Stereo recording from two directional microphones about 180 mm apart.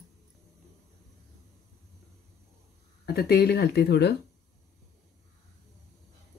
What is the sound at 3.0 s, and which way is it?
Speech, 60° left (ahead or behind).